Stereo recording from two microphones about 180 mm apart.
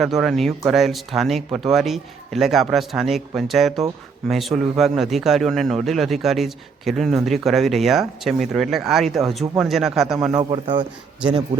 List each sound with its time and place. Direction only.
0.0 s speech: centre (ahead or behind)
10.5 s speech: 25° right (ahead or behind)